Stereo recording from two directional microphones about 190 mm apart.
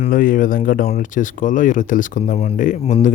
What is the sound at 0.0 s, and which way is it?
Speech, 45° left (ahead or behind).